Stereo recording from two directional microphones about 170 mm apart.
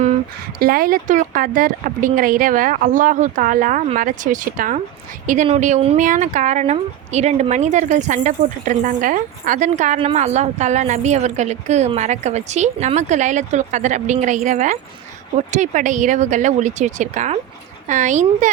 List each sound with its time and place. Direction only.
0.6 s a woman's voice: 60° right (ahead or behind); by 18.5 s 45° right (ahead or behind)